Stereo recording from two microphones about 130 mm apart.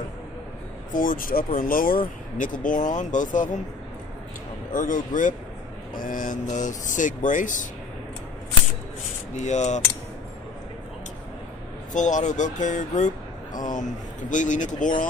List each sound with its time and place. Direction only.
0.9 s speech: 90° left
4.7 s speech: 90° left
9.3 s speech: 65° left (ahead or behind)
11.9 s speech: 70° left (ahead or behind)